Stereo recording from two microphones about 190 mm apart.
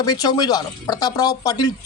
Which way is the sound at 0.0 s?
20° left (ahead or behind).